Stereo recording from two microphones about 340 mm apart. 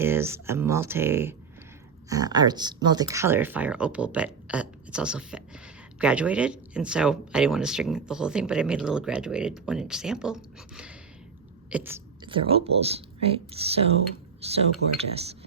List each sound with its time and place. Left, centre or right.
0.0 s speech: centre